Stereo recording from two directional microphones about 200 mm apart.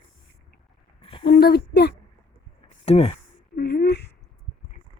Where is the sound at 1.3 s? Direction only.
50° left (ahead or behind).